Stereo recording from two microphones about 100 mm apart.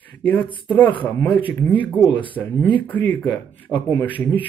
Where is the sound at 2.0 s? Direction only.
50° left (ahead or behind).